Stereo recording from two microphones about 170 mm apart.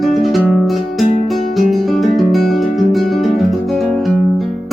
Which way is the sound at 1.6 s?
Centre (ahead or behind).